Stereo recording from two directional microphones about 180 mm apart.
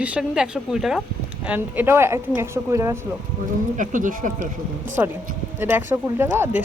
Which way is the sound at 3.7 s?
45° right (ahead or behind).